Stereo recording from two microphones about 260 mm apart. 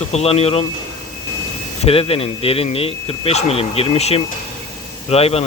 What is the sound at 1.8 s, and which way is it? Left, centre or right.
Speech, left.